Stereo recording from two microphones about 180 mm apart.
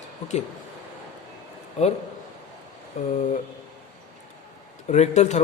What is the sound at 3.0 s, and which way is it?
Speech, 40° left (ahead or behind).